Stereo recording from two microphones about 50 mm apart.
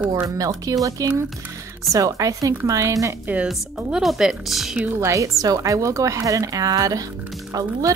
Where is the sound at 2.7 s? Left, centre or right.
Right.